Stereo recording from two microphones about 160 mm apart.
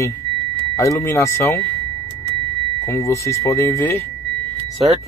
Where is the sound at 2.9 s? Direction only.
20° left (ahead or behind).